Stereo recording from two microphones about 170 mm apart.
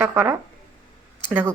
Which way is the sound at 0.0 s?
15° right (ahead or behind).